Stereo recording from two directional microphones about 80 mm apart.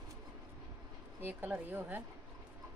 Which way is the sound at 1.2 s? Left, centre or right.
Right.